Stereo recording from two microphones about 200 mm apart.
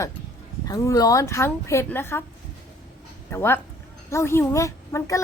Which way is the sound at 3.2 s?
10° left (ahead or behind).